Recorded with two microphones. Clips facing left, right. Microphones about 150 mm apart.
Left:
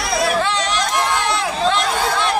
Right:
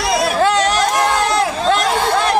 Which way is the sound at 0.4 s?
45° right (ahead or behind).